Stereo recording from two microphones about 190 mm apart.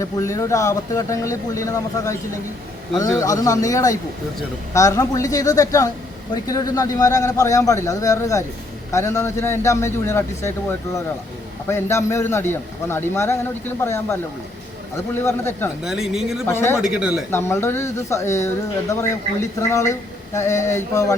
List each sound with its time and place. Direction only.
0.0 s a man's voice: 15° left (ahead or behind)
15.8 s speech: centre (ahead or behind)
16.5 s a man's voice: 15° left (ahead or behind)
16.8 s speech: 5° right (ahead or behind)
17.3 s a man's voice: 15° left (ahead or behind)